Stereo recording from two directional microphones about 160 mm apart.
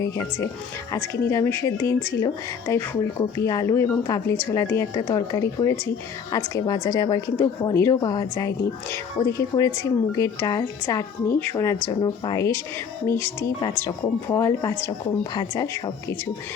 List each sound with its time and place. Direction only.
0.0 s speech: 15° left (ahead or behind)
13.8 s speech: 20° left (ahead or behind)